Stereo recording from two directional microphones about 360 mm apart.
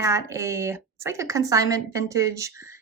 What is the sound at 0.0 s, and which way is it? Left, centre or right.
Speech, centre.